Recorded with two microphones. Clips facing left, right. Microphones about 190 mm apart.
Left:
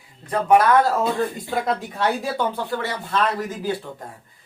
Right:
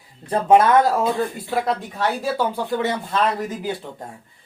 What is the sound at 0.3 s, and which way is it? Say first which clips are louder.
Speech: right 2 dB; 25° right (ahead or behind).